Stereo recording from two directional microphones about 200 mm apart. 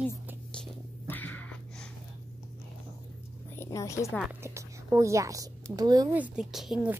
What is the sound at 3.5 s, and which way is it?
Speech, 15° left (ahead or behind).